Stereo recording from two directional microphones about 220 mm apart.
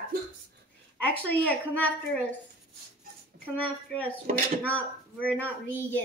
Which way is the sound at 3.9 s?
5° left (ahead or behind).